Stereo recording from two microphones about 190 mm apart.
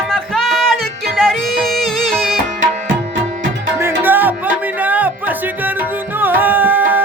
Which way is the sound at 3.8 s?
10° right (ahead or behind).